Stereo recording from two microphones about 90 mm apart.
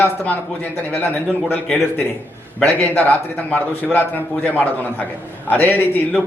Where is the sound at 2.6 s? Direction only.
20° left (ahead or behind).